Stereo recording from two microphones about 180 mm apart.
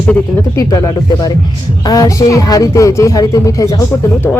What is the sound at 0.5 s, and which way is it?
Speech, 20° left (ahead or behind).